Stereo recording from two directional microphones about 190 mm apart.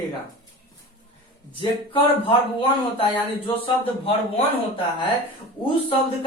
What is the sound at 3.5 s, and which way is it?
Speech, 30° left (ahead or behind).